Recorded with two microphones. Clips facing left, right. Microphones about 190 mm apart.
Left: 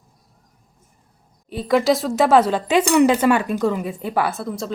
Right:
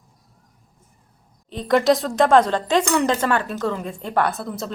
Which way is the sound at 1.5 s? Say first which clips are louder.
Even; 5° left (ahead or behind).